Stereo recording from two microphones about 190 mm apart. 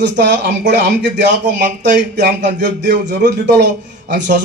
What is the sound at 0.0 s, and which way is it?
Speech, 65° right (ahead or behind).